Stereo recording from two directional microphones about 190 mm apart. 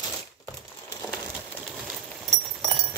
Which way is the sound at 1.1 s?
5° left (ahead or behind).